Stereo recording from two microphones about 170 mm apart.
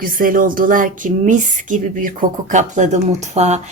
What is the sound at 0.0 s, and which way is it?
Speech, 55° right (ahead or behind).